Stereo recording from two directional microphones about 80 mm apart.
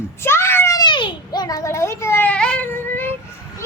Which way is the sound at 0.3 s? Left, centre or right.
Left.